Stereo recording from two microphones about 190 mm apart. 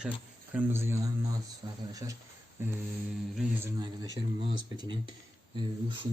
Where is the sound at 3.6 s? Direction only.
20° right (ahead or behind).